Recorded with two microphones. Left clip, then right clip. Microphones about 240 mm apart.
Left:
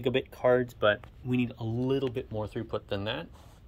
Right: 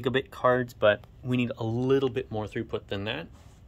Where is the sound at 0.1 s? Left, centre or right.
Right.